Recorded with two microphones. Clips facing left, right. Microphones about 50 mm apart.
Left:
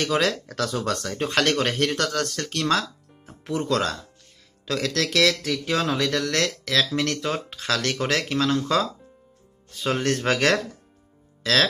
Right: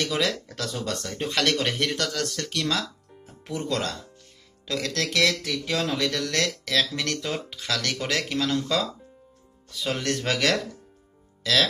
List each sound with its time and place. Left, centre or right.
0.0 s speech: left
0.7 s speech: left
3.3 s speech: left
4.6 s speech: left